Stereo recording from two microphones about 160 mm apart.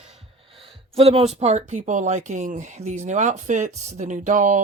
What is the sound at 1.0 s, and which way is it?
Speech, 40° right (ahead or behind).